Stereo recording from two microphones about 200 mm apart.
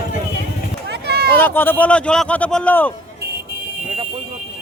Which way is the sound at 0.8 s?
55° right (ahead or behind).